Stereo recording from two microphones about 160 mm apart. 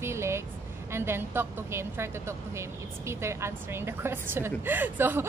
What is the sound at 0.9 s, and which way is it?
A woman's voice, 15° right (ahead or behind).